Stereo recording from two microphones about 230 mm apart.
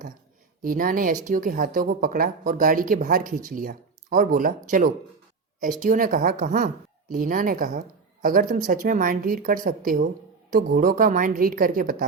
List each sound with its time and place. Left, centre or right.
0.6 s speech: right